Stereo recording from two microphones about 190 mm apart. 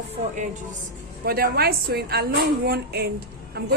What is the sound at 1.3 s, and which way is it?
A woman's voice, 55° right (ahead or behind).